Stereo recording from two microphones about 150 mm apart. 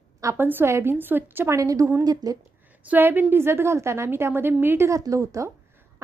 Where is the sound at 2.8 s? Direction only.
10° right (ahead or behind).